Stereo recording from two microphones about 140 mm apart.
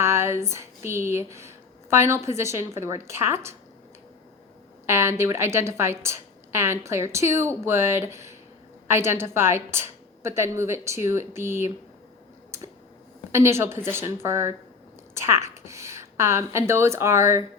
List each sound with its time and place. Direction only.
0.0 s a woman's voice: 20° right (ahead or behind)
4.9 s a woman's voice: 20° right (ahead or behind)
13.3 s a woman's voice: 20° right (ahead or behind)